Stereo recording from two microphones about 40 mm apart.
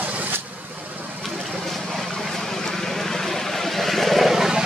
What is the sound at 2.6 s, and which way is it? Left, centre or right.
Vehicle, centre.